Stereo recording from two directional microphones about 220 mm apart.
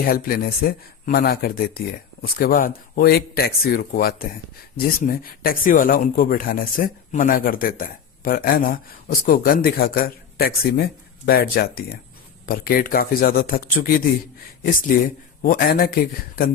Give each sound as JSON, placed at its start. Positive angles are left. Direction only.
{"t": 0.0, "sound": "speech", "side_deg": 40}